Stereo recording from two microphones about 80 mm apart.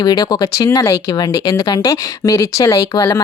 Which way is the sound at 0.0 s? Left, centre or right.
Left.